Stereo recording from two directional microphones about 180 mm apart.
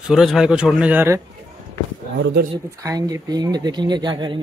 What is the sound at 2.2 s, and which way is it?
Speech, 80° right.